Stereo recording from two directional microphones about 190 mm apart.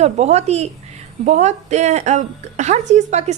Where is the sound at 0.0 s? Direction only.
35° right (ahead or behind).